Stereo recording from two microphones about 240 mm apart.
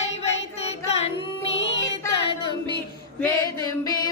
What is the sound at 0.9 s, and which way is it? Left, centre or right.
Carnatic music, left.